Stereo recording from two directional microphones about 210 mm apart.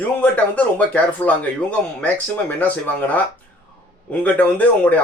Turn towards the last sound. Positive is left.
turn(degrees=5)  # may be behind; listen again after turning